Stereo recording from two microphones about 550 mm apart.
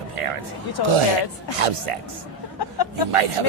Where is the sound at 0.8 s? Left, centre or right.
Left.